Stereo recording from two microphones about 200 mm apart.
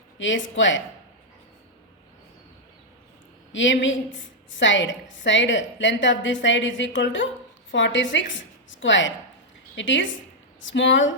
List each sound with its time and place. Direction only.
0.2 s a woman's voice: 70° left (ahead or behind)
3.5 s a woman's voice: 70° left (ahead or behind)